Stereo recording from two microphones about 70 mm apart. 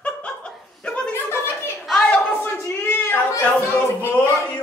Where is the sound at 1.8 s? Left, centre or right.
Centre.